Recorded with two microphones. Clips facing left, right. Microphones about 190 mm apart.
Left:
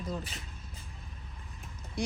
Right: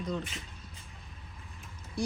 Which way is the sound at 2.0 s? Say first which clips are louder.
Right 1 dB; 20° left (ahead or behind).